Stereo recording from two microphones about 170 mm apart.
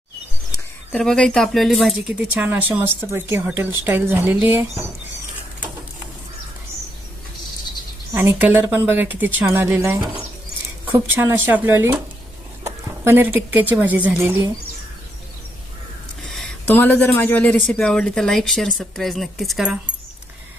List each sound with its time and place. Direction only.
0.9 s speech: 5° left (ahead or behind); by 4.9 s 15° right (ahead or behind)
8.1 s a woman's voice: 15° right (ahead or behind)
16.3 s speech: 5° left (ahead or behind)